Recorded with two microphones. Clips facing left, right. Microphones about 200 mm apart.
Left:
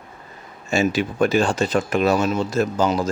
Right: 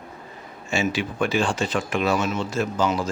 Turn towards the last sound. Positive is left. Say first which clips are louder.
# left 3 dB
turn(degrees=40)  # may be behind; listen again after turning